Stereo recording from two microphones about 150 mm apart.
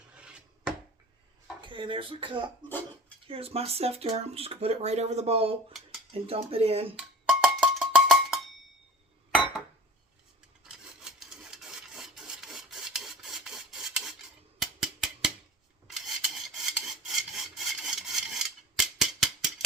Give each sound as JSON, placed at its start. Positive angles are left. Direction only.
{"t": 0.1, "sound": "filing", "side_deg": -5}
{"t": 1.6, "sound": "speech", "side_deg": -35}
{"t": 6.9, "sound": "cowbell", "side_deg": -5}
{"t": 10.6, "sound": "rub", "side_deg": -5}
{"t": 14.6, "sound": "a sound", "side_deg": -5}
{"t": 15.9, "sound": "filing", "side_deg": 0}
{"t": 17.1, "sound": "rub", "side_deg": 0}